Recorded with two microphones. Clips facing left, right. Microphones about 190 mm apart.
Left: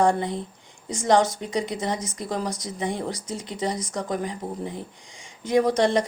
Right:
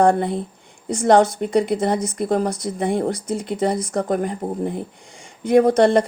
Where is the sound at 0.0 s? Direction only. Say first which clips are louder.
Right 5 dB; 55° right (ahead or behind).